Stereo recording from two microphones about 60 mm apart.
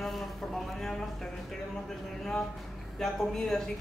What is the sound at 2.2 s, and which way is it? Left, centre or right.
Speech, centre.